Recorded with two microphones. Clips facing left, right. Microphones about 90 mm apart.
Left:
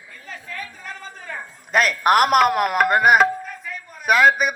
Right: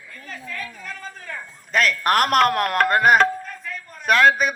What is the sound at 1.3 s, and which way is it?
Music, 10° left (ahead or behind).